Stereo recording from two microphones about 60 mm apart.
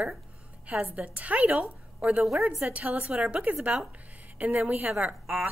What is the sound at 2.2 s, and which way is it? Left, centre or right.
Speech, centre.